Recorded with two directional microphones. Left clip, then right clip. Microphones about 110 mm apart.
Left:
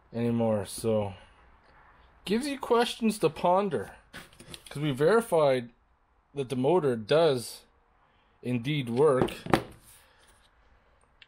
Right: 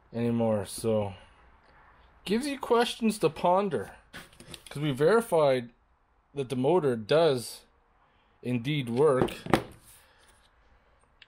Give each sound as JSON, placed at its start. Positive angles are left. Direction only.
{"t": 0.1, "sound": "speech", "side_deg": -5}
{"t": 8.4, "sound": "speech", "side_deg": -10}
{"t": 9.4, "sound": "a sound", "side_deg": 0}